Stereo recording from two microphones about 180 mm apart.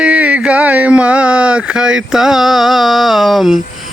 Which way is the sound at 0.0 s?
5° right (ahead or behind).